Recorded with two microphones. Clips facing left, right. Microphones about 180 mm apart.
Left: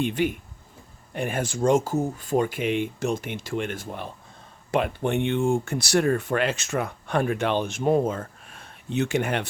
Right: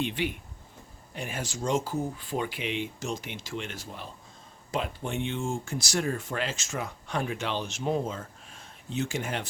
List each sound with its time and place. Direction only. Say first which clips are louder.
0.0 s speech: left 6 dB; 45° left (ahead or behind)
1.1 s speech: left 8 dB; 55° left (ahead or behind)